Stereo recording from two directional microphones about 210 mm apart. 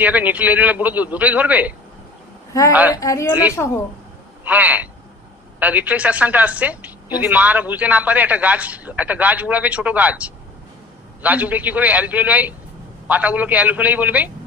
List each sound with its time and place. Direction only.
0.0 s a woman's voice: 10° right (ahead or behind)
2.7 s a woman's voice: 10° right (ahead or behind)
3.0 s a woman's voice: 15° left (ahead or behind)
4.5 s a woman's voice: 5° right (ahead or behind)